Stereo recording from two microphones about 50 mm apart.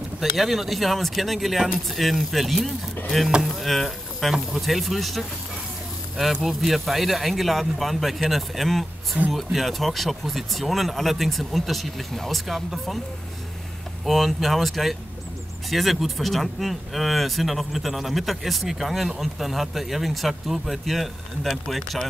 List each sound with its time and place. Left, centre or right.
0.2 s speech: centre
6.4 s speech: centre
14.0 s speech: centre